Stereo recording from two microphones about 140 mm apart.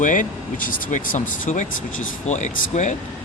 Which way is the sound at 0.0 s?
65° left (ahead or behind).